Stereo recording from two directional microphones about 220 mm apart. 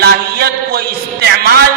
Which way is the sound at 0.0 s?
45° right (ahead or behind).